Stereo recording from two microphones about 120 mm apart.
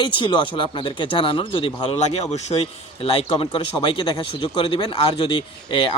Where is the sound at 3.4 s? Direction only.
45° left (ahead or behind).